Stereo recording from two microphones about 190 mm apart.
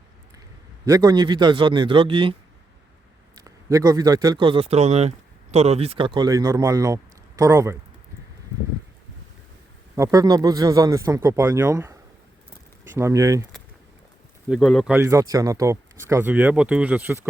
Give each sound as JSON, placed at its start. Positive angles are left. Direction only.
{"t": 0.9, "sound": "a man's voice", "side_deg": -20}
{"t": 3.3, "sound": "speech", "side_deg": -20}
{"t": 9.9, "sound": "speech", "side_deg": -15}
{"t": 14.5, "sound": "speech", "side_deg": 0}
{"t": 14.9, "sound": "speech", "side_deg": -15}